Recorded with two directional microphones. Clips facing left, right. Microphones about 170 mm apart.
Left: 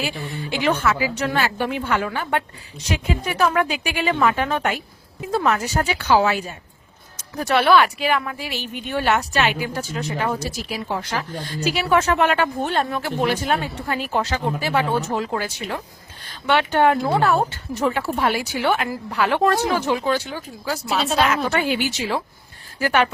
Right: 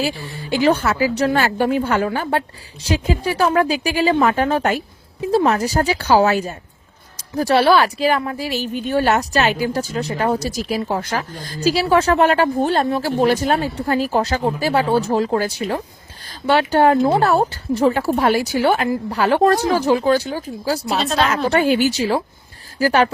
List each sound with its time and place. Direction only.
0.0 s speech: 35° right (ahead or behind)